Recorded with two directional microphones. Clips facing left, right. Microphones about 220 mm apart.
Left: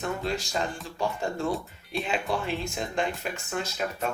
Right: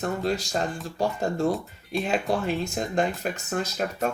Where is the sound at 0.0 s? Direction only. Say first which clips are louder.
Right 4 dB; 40° right (ahead or behind).